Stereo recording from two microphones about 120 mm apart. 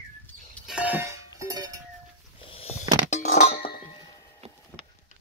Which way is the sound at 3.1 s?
80° left.